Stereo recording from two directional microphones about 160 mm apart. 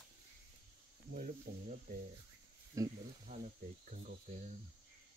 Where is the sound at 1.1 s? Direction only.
55° right (ahead or behind).